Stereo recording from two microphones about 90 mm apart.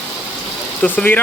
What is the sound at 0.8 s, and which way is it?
Speech, 15° left (ahead or behind).